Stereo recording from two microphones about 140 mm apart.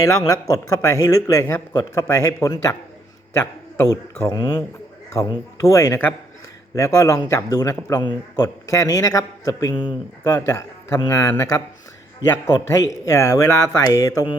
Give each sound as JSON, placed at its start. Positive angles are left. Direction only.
{"t": 0.0, "sound": "speech", "side_deg": 25}